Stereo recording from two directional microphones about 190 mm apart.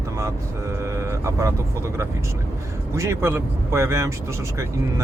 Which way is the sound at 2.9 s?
15° right (ahead or behind).